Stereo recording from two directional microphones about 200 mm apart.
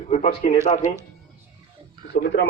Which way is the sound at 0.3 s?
35° left (ahead or behind).